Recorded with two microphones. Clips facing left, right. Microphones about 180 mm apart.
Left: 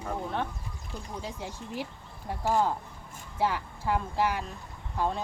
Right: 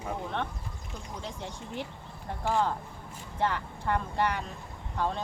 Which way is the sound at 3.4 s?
5° left (ahead or behind).